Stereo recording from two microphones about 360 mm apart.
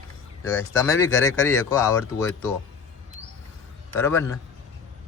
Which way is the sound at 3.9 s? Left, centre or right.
Centre.